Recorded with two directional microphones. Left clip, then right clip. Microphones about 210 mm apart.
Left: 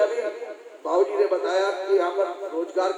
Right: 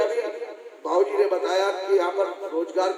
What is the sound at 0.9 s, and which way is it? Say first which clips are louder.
A man's voice: even; 50° right (ahead or behind).